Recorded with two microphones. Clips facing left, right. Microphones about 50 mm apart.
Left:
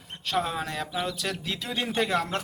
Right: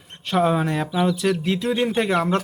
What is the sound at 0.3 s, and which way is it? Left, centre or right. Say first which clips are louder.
Speech: right 9 dB; centre.